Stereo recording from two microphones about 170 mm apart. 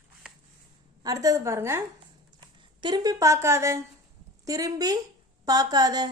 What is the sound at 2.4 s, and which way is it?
Speech, 25° right (ahead or behind).